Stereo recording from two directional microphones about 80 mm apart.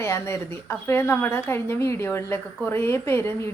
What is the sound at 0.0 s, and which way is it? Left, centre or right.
A woman's voice, left.